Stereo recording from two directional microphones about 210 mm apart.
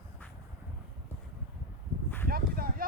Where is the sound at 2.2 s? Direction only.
45° right (ahead or behind).